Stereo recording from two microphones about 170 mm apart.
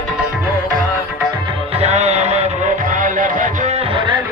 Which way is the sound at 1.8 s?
40° right (ahead or behind).